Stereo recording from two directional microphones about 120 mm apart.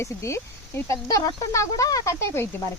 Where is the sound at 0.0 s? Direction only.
25° left (ahead or behind).